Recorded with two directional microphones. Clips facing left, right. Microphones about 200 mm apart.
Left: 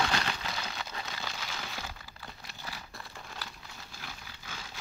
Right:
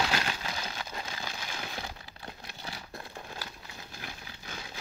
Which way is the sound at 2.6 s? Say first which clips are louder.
Right 3 dB; 25° right (ahead or behind).